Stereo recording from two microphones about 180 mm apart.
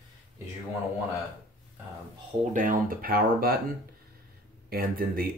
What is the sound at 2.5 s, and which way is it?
Speech, 50° right (ahead or behind).